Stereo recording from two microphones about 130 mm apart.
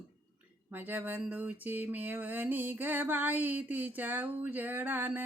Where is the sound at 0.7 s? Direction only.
15° right (ahead or behind).